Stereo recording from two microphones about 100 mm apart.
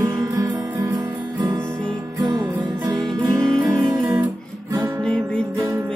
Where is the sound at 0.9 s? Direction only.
45° right (ahead or behind).